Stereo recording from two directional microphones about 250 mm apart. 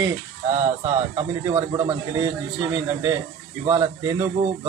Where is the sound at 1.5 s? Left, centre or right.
Centre.